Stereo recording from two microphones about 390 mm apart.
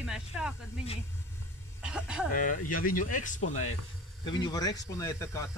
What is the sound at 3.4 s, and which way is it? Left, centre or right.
Speech, left.